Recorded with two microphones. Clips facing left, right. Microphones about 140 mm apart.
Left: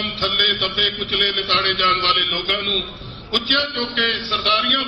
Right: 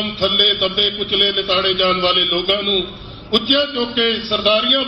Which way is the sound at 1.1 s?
5° right (ahead or behind).